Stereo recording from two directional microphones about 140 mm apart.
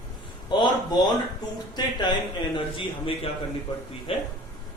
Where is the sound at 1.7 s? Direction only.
30° left (ahead or behind).